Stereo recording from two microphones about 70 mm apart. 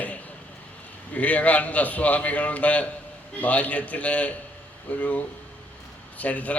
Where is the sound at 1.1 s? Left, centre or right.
Left.